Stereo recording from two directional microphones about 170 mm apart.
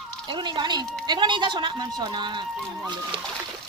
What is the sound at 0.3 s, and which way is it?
Speech, 25° right (ahead or behind).